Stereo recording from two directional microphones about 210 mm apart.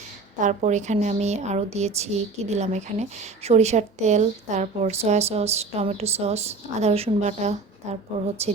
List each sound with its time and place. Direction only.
0.3 s a woman's voice: 35° right (ahead or behind)